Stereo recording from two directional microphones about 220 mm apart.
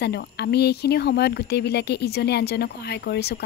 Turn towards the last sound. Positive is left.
turn(degrees=50)  # may be behind; listen again after turning